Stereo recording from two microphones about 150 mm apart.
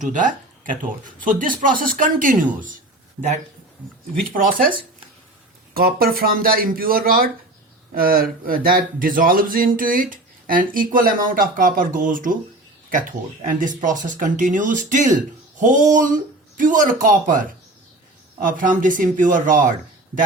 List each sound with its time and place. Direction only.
0.0 s speech: 60° right (ahead or behind)
4.1 s speech: 70° right (ahead or behind)
5.7 s speech: 80° right; by 17.4 s 60° right (ahead or behind)
18.4 s speech: 65° right (ahead or behind)